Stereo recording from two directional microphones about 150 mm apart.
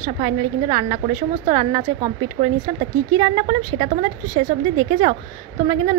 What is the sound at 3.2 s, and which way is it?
Speech, 35° right (ahead or behind).